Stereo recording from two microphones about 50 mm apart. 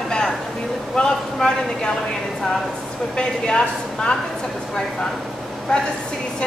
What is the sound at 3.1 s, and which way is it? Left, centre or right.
A woman's voice, centre.